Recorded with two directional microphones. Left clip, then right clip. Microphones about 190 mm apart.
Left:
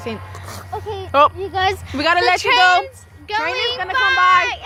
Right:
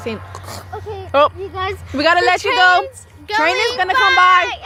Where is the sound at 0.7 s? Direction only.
35° left (ahead or behind).